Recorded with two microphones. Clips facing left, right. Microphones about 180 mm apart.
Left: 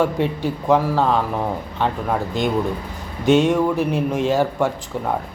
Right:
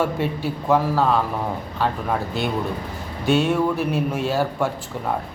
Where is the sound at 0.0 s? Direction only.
15° left (ahead or behind).